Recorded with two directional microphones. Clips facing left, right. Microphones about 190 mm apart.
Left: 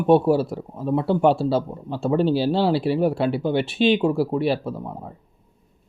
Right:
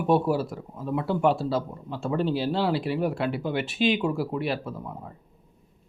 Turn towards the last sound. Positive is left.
turn(degrees=30)  # may be behind; listen again after turning